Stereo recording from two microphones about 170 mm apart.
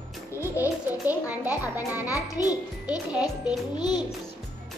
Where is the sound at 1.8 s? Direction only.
20° left (ahead or behind).